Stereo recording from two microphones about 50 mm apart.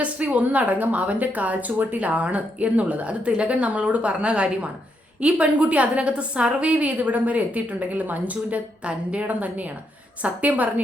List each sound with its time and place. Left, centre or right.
0.0 s a woman's voice: right